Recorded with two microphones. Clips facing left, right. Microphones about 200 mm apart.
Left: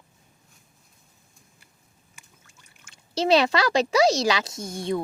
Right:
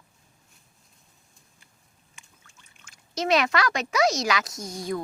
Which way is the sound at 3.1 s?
30° left (ahead or behind).